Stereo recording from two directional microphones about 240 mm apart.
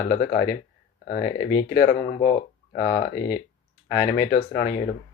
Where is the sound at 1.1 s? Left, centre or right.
Centre.